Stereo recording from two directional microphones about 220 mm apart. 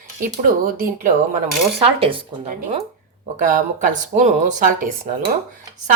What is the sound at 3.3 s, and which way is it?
Speech, 35° right (ahead or behind).